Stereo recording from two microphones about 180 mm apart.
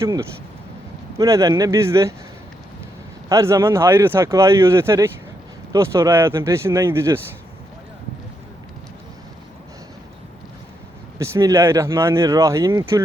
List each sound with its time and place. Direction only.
0.0 s speech: 15° right (ahead or behind)
3.2 s speech: 15° right (ahead or behind)
11.2 s speech: 15° right (ahead or behind)